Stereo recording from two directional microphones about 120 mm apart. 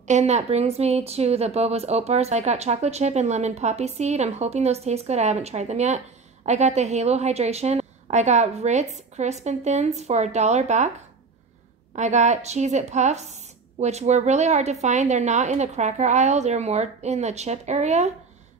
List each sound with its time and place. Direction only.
0.0 s a woman's voice: 75° right (ahead or behind)
11.9 s a woman's voice: 75° right (ahead or behind)